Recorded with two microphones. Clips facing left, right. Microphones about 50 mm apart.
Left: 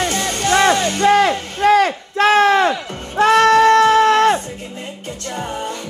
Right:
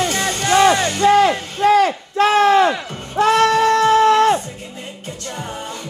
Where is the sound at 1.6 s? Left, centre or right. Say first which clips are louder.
Even; left.